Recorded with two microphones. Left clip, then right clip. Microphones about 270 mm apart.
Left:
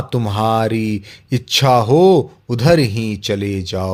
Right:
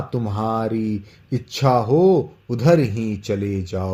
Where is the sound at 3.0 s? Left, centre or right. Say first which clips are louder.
Left 4 dB; left.